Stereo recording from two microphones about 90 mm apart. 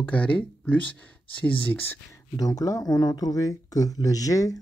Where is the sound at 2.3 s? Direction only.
40° left (ahead or behind).